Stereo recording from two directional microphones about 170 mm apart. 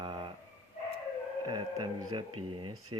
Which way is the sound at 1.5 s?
25° right (ahead or behind).